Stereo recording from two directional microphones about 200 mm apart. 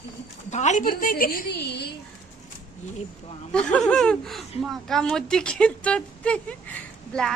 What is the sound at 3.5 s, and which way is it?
Speech, 5° left (ahead or behind).